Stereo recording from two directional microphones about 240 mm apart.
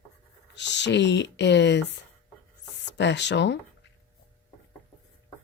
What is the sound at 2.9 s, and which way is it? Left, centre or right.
Speech, left.